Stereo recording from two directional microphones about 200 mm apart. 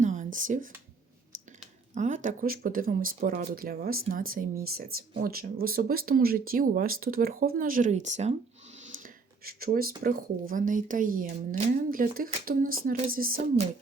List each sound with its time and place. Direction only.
0.0 s a sound: 40° right (ahead or behind)
0.3 s speech: 40° right (ahead or behind)
2.0 s speech: 40° right (ahead or behind)
9.4 s speech: 50° right (ahead or behind)